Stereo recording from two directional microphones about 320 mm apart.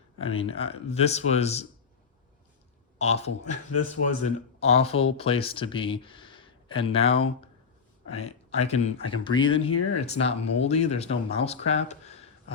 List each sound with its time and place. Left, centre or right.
0.3 s speech: centre
3.0 s speech: centre
3.5 s speech: left
4.2 s speech: centre